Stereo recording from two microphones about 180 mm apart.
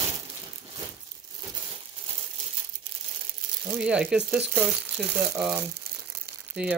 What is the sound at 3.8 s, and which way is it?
Speech, 5° right (ahead or behind).